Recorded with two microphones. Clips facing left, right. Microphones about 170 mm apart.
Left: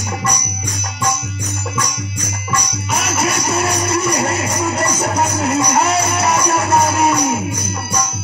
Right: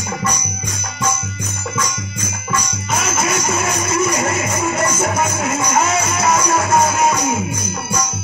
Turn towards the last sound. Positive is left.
turn(degrees=35)  # may be behind; listen again after turning